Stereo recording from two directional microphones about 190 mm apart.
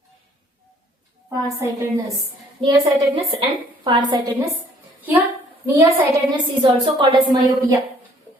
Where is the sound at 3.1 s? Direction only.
30° right (ahead or behind).